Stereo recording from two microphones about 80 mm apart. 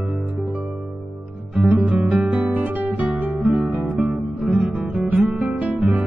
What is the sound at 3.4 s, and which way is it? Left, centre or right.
Music, centre.